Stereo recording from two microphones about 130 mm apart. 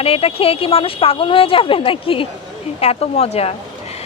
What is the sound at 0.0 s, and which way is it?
A woman's voice, 50° left (ahead or behind).